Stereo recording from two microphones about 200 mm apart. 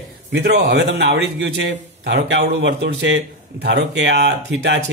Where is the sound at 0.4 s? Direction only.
55° right (ahead or behind).